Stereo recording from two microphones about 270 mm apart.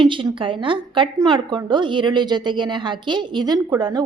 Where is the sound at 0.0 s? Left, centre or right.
Centre.